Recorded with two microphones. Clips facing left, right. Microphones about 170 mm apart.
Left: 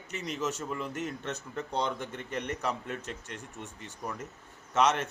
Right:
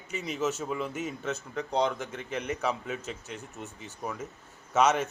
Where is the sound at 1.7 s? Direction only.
90° right.